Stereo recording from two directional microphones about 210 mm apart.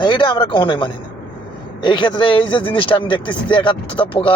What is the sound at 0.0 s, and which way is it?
Speech, 20° left (ahead or behind).